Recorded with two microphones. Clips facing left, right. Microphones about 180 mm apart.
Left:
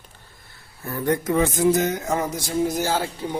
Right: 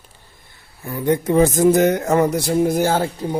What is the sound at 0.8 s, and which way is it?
Speech, 15° right (ahead or behind).